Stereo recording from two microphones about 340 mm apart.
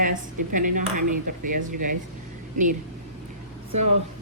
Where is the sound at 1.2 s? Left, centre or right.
Right.